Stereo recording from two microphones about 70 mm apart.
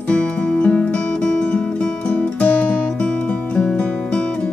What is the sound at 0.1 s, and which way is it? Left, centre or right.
Music, centre.